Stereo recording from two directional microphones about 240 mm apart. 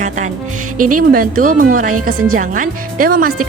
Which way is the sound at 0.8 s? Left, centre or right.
Right.